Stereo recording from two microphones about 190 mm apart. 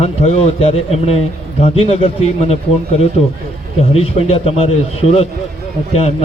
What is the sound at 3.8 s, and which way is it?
A man's voice, 30° left (ahead or behind).